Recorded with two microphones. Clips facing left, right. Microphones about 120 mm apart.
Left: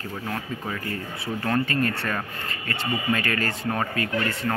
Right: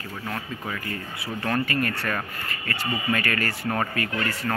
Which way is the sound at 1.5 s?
25° left (ahead or behind).